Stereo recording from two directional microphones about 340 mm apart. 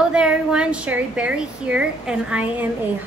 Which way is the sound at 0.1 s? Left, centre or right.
Centre.